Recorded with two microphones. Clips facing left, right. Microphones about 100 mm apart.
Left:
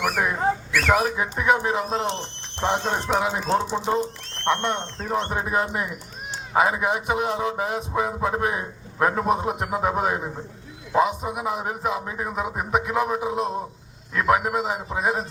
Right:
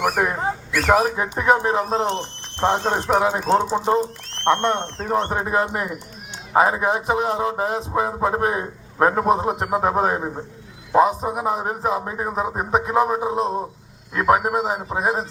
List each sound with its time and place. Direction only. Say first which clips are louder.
0.0 s speech: right 2 dB; 35° right (ahead or behind)
2.1 s speech: right 4 dB; 45° right (ahead or behind)
6.5 s speech: right 3 dB; 35° right (ahead or behind)